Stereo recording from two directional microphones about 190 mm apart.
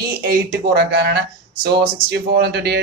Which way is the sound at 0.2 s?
60° right (ahead or behind).